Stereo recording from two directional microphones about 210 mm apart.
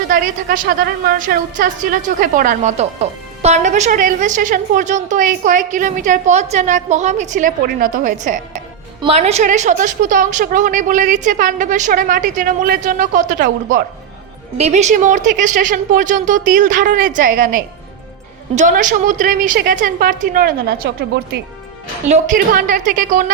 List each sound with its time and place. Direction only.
0.1 s a woman's voice: 40° right (ahead or behind)
22.1 s a woman's voice: 40° right (ahead or behind)